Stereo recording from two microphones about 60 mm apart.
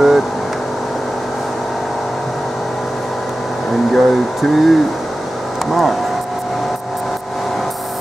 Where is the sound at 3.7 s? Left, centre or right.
Centre.